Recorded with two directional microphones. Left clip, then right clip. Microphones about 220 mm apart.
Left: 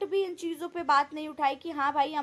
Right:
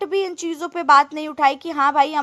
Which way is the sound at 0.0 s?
25° right (ahead or behind).